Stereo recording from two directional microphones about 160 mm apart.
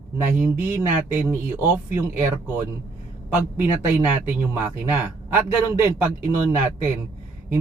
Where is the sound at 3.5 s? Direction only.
10° right (ahead or behind).